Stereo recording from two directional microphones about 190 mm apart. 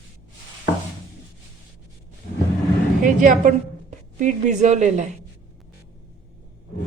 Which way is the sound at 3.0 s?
45° right (ahead or behind).